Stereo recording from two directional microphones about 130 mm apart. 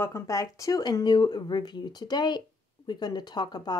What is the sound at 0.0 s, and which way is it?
A woman's voice, 25° left (ahead or behind).